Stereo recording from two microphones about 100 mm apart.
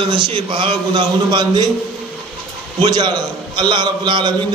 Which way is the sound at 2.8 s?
45° right (ahead or behind).